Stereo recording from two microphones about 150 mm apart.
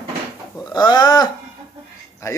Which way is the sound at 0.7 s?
30° left (ahead or behind).